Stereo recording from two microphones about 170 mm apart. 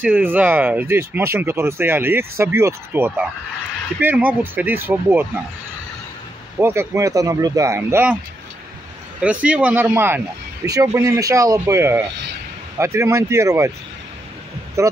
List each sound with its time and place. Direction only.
0.0 s speech: 10° right (ahead or behind)
6.6 s speech: 15° right (ahead or behind)
9.2 s speech: 10° right (ahead or behind)
14.8 s speech: 15° right (ahead or behind)